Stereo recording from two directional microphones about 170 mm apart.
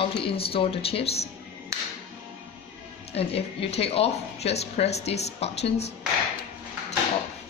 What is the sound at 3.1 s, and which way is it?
Speech, 35° left (ahead or behind).